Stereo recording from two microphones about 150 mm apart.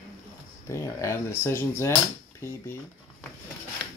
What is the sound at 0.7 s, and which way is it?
Speech, 20° left (ahead or behind).